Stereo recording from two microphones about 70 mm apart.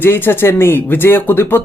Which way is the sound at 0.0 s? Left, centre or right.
Left.